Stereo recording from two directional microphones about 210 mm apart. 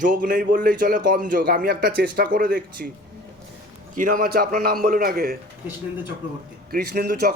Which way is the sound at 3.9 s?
40° right (ahead or behind).